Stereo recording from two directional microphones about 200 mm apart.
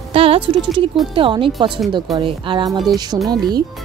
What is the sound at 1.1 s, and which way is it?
Speech, 25° right (ahead or behind).